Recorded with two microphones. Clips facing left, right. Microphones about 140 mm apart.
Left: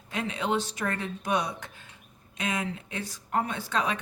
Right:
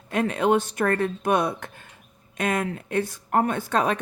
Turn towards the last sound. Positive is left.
turn(degrees=-50)  # may be behind; listen again after turning